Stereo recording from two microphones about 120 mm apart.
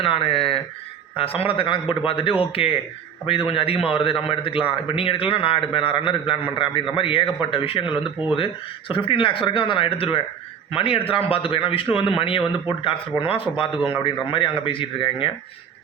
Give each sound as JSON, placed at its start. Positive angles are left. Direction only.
{"t": 0.0, "sound": "a man's voice", "side_deg": 50}
{"t": 8.2, "sound": "speech", "side_deg": -10}
{"t": 8.9, "sound": "a man's voice", "side_deg": 45}